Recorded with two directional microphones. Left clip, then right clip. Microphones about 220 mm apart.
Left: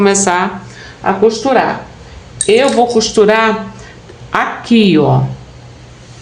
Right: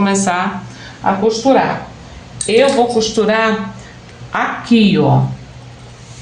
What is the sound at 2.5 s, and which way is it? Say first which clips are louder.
A woman's voice: even; 40° left (ahead or behind).